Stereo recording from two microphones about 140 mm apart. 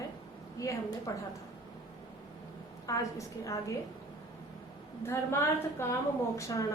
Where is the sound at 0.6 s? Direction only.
25° left (ahead or behind).